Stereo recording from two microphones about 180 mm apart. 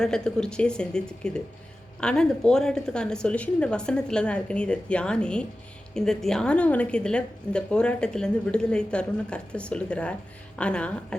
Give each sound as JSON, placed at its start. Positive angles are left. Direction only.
{"t": 0.0, "sound": "a woman's voice", "side_deg": 5}